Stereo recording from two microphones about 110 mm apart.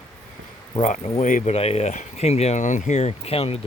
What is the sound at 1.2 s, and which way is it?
Speech, 75° left (ahead or behind).